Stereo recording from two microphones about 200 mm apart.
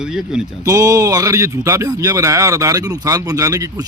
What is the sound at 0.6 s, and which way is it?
A man's voice, 15° right (ahead or behind).